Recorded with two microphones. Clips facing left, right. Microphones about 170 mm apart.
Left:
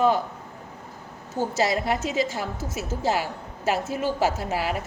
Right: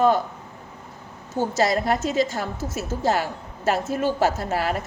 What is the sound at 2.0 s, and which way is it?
A woman's voice, 10° left (ahead or behind).